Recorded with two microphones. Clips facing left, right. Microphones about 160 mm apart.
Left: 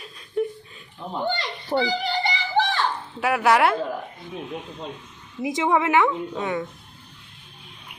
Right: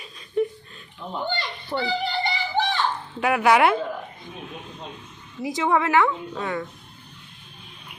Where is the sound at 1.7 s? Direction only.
35° left (ahead or behind).